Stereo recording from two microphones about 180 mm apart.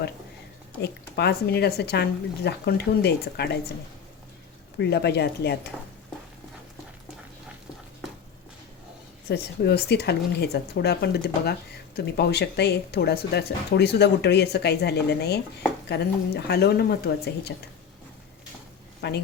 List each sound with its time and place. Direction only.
0.8 s speech: 65° left (ahead or behind)
4.8 s speech: 70° left (ahead or behind)
9.3 s speech: 65° left (ahead or behind)
19.0 s speech: 65° left (ahead or behind)